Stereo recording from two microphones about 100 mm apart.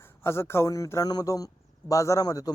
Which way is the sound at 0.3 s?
25° left (ahead or behind).